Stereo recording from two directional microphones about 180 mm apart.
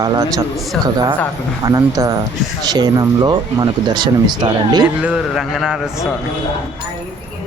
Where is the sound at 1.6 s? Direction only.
20° right (ahead or behind).